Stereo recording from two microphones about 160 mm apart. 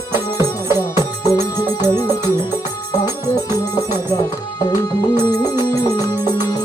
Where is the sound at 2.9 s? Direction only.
25° left (ahead or behind).